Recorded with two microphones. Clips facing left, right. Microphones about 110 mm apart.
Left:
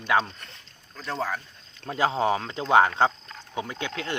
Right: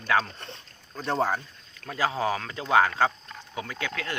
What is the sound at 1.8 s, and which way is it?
Speech, 25° left (ahead or behind).